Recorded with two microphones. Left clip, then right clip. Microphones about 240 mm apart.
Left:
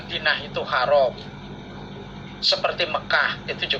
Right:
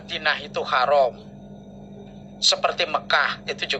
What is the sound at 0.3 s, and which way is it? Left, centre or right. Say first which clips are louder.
Speech: even; right.